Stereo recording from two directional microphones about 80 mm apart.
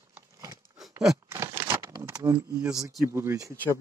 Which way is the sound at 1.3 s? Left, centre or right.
Right.